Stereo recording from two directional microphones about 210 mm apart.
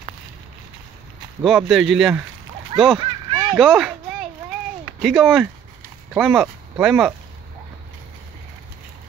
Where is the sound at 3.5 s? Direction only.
Centre (ahead or behind).